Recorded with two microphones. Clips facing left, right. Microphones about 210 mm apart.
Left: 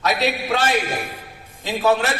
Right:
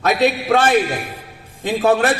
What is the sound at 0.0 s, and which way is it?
Speech, 50° right (ahead or behind).